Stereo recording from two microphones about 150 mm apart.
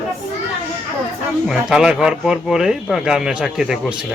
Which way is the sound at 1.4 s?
5° right (ahead or behind).